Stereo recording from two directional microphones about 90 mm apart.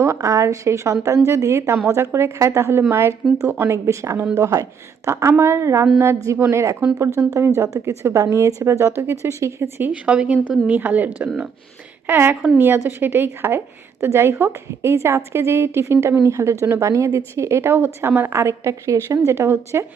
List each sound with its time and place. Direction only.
0.0 s a woman's voice: 35° right (ahead or behind)
9.9 s a woman's voice: 15° right (ahead or behind)